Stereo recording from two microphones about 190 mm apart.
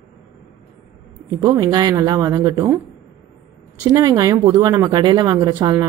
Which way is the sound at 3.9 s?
20° right (ahead or behind).